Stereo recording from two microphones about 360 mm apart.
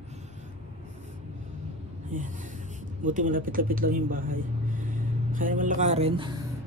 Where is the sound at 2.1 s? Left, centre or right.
Right.